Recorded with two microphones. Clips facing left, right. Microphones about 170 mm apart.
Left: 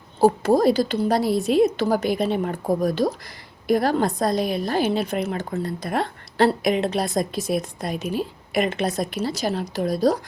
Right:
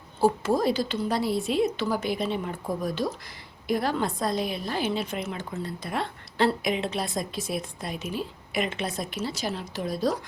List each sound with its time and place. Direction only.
0.2 s a woman's voice: 40° left (ahead or behind)
4.9 s speech: 55° left (ahead or behind)
5.4 s a woman's voice: 40° left (ahead or behind)